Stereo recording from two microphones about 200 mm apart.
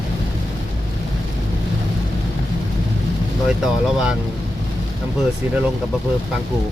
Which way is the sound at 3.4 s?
5° right (ahead or behind).